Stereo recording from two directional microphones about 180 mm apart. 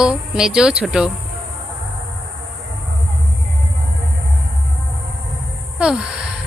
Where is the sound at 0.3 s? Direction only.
5° right (ahead or behind).